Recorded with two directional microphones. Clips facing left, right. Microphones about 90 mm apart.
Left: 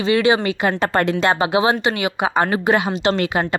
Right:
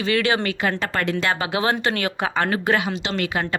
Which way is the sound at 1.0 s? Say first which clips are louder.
Left 5 dB; 30° left (ahead or behind).